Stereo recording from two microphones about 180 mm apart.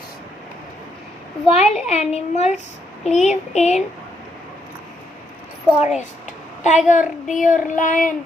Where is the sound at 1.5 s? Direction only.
35° left (ahead or behind).